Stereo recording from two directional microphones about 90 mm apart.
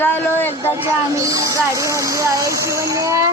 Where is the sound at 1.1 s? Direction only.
40° right (ahead or behind).